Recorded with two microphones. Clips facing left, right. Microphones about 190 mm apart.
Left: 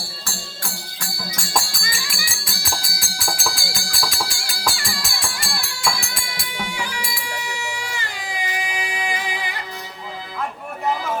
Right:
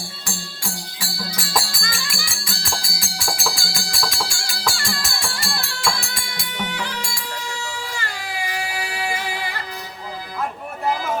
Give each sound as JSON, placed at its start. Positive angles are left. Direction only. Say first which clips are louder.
{"t": 0.9, "sound": "music", "louder": "right 2 dB", "side_deg": -5}
{"t": 7.3, "sound": "baby cry", "louder": "left 1 dB", "side_deg": 15}